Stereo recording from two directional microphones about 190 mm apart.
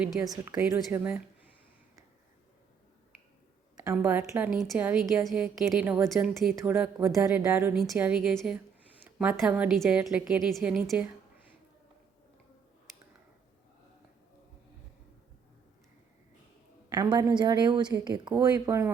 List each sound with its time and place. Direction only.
0.0 s a woman's voice: 5° right (ahead or behind)
3.9 s a woman's voice: 5° right (ahead or behind)
16.9 s a woman's voice: 20° right (ahead or behind)